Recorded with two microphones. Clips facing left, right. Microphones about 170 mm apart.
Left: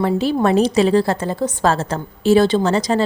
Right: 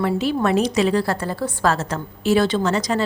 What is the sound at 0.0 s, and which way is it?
A woman's voice, 30° left (ahead or behind).